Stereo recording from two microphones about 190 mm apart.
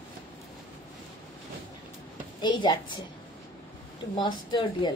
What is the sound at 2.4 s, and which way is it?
Speech, 25° left (ahead or behind).